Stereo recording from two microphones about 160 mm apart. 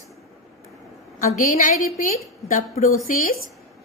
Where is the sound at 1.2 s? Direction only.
55° left (ahead or behind).